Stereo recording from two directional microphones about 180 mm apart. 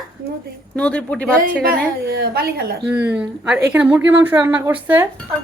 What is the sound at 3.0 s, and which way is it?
A woman's voice, 5° right (ahead or behind).